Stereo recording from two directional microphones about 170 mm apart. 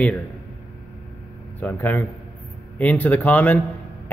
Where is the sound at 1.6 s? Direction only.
10° left (ahead or behind).